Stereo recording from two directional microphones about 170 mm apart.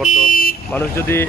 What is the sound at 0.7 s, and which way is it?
Speech, 10° left (ahead or behind).